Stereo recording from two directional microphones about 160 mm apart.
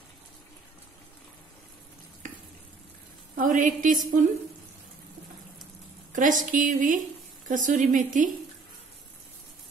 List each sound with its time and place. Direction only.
2.2 s stir: 50° right (ahead or behind)
3.3 s a woman's voice: 55° right (ahead or behind)
6.1 s a woman's voice: 55° right (ahead or behind)